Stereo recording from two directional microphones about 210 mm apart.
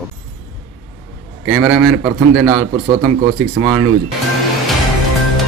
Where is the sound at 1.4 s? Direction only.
15° right (ahead or behind).